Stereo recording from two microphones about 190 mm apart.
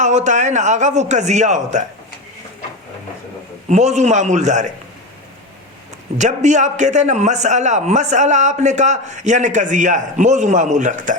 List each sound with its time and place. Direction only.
0.0 s a man's voice: 40° right (ahead or behind)
3.7 s a man's voice: 35° right (ahead or behind)
6.1 s a man's voice: 40° right (ahead or behind)